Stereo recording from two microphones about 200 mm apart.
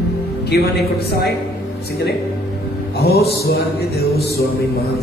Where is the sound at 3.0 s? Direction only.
55° left (ahead or behind).